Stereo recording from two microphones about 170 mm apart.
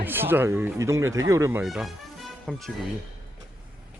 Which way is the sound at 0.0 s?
10° right (ahead or behind).